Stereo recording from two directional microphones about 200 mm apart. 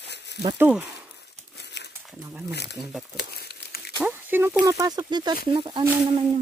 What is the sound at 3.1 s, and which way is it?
Crumpling, 50° left (ahead or behind).